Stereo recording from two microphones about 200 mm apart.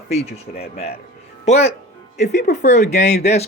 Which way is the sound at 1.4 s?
35° left (ahead or behind).